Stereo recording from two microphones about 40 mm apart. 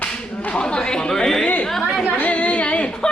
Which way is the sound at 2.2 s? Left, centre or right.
Left.